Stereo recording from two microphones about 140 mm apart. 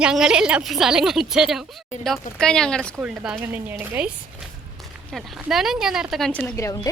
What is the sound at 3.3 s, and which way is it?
Speech, 15° right (ahead or behind).